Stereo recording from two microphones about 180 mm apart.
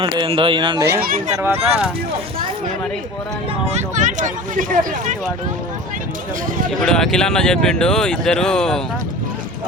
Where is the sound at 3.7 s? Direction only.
40° right (ahead or behind).